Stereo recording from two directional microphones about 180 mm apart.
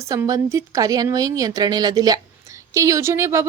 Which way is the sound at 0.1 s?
20° right (ahead or behind).